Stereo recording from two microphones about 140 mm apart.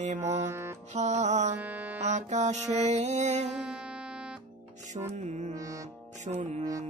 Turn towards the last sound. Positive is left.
turn(degrees=-55)  # may be behind; listen again after turning